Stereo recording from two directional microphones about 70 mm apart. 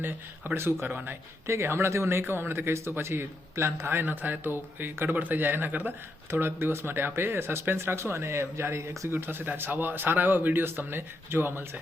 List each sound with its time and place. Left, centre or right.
0.0 s speech: right